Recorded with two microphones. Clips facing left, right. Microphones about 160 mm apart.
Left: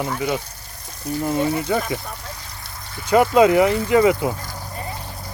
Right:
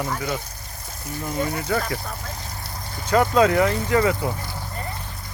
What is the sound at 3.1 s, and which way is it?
Speech, 15° left (ahead or behind).